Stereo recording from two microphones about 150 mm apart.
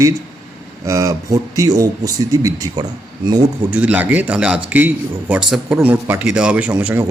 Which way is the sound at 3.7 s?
10° right (ahead or behind).